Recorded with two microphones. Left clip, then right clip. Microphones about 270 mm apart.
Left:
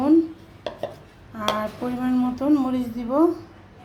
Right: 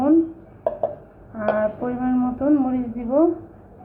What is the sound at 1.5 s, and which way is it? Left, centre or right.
A woman's voice, left.